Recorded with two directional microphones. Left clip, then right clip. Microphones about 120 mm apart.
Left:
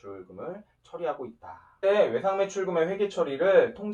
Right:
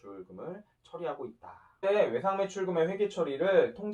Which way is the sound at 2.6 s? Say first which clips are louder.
Left 3 dB; 15° right (ahead or behind).